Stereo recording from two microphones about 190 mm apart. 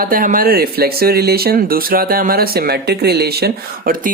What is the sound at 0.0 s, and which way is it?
Speech, 50° right (ahead or behind).